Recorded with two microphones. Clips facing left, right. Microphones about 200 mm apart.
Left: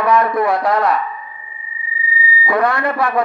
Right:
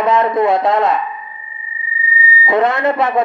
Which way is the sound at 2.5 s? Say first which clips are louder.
Right 3 dB; 20° right (ahead or behind).